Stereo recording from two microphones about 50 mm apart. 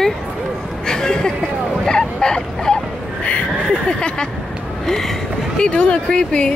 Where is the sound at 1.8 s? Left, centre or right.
Centre.